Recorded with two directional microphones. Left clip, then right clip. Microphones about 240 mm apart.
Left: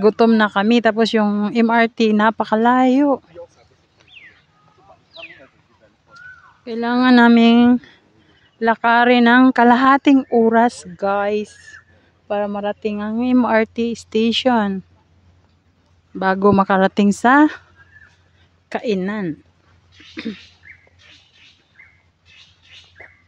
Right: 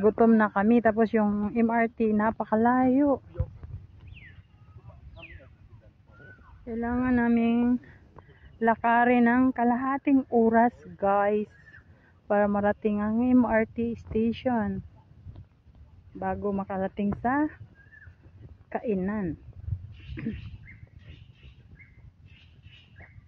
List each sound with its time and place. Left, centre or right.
0.0 s speech: left
6.6 s speech: left
8.5 s speech: left
16.2 s speech: left
18.7 s speech: left
20.2 s bird: centre